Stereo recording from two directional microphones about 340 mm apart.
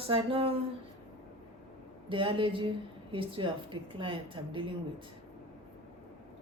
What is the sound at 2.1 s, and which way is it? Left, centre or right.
A woman's voice, centre.